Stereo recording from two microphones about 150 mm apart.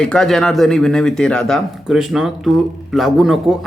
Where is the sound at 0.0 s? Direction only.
5° left (ahead or behind).